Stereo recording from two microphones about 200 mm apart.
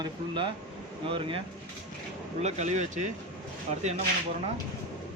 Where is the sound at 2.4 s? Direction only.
35° right (ahead or behind).